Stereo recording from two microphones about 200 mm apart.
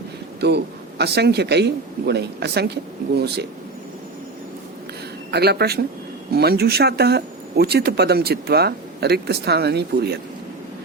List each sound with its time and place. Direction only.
0.3 s a man's voice: 55° right (ahead or behind)
5.3 s speech: 55° right (ahead or behind)